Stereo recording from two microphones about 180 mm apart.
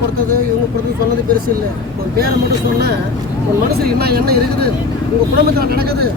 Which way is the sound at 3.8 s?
60° right (ahead or behind).